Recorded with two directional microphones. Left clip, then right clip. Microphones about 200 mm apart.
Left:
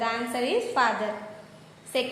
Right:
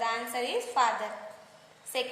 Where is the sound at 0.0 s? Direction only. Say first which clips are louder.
Left 3 dB; 20° right (ahead or behind).